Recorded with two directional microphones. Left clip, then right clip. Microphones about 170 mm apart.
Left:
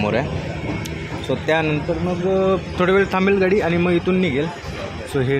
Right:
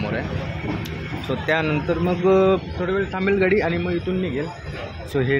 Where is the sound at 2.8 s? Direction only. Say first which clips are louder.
Left 7 dB; 45° left (ahead or behind).